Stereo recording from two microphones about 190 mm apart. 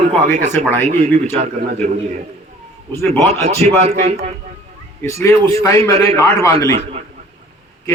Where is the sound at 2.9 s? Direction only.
15° left (ahead or behind).